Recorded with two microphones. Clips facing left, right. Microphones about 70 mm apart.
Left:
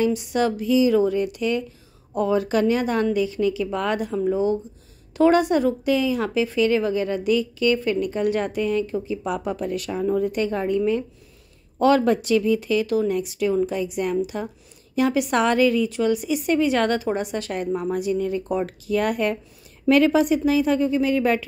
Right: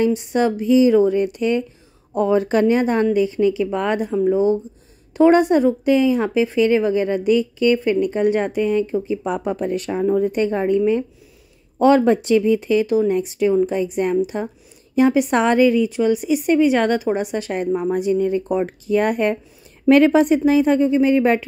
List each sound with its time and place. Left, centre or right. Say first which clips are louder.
0.0 s a woman's voice: right 3 dB; right